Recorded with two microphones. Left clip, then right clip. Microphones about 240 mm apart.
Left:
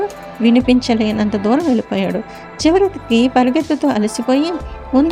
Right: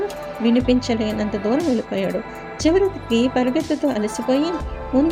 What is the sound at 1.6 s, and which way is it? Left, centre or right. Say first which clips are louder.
Speech: left 4 dB; centre.